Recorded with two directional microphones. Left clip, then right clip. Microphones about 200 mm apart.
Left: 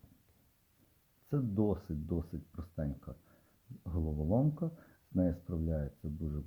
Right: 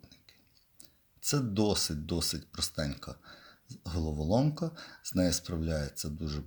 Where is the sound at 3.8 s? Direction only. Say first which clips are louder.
Right 4 dB; 20° right (ahead or behind).